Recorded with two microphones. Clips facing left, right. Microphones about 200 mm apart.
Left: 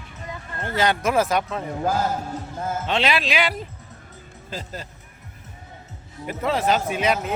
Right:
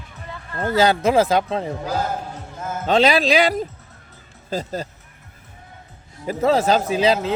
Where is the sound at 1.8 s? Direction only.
50° left (ahead or behind).